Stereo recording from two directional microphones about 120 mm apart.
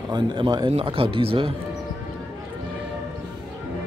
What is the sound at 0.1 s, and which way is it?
Speech, 40° right (ahead or behind).